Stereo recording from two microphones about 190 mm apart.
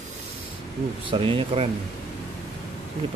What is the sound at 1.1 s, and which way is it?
Speech, 25° right (ahead or behind).